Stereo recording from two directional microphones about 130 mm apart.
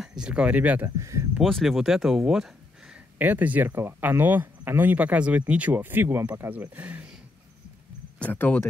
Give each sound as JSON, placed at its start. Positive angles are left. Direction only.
{"t": 0.0, "sound": "speech", "side_deg": -5}
{"t": 0.8, "sound": "speech", "side_deg": -25}
{"t": 1.4, "sound": "speech", "side_deg": 0}
{"t": 8.2, "sound": "speech", "side_deg": 15}